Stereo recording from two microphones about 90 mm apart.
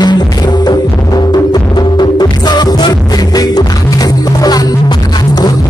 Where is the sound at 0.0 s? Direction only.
50° left (ahead or behind).